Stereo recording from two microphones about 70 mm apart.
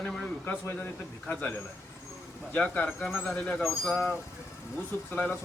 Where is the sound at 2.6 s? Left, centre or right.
Centre.